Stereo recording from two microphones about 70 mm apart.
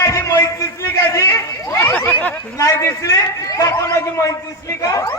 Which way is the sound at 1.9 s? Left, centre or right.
Left.